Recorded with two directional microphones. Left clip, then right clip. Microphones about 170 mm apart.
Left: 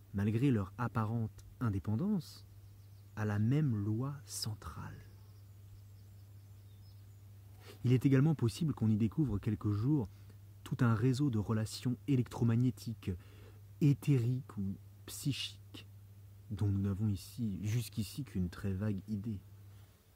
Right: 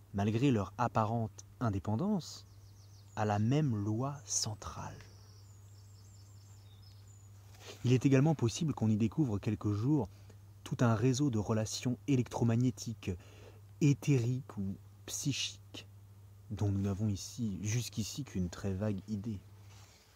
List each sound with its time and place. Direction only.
0.1 s speech: 25° left (ahead or behind)
3.2 s speech: 20° left (ahead or behind)
7.9 s speech: 25° left (ahead or behind)
13.0 s a sound: 25° left (ahead or behind)
13.8 s speech: 25° left (ahead or behind)
16.5 s speech: 25° left (ahead or behind)
17.1 s speech: 90° left
17.4 s speech: 25° left (ahead or behind)